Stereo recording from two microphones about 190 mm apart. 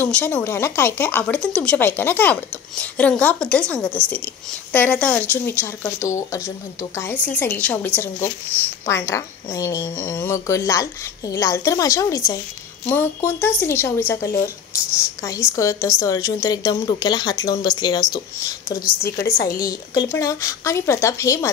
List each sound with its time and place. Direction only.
0.0 s speech: 10° left (ahead or behind)
15.5 s a woman's voice: 15° left (ahead or behind)
19.3 s a woman's voice: 50° left (ahead or behind)
19.6 s speech: 20° left (ahead or behind)